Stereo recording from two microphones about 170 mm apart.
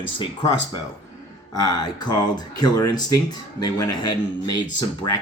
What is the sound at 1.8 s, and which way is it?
Speech, 25° left (ahead or behind).